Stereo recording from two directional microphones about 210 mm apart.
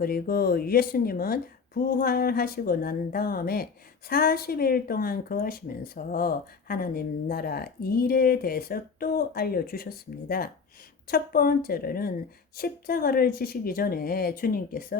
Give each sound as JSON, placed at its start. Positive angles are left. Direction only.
{"t": 0.0, "sound": "speech", "side_deg": 45}